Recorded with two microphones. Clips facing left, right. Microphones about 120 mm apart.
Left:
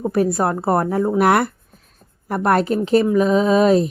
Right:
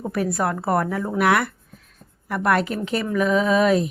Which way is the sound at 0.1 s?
30° left (ahead or behind).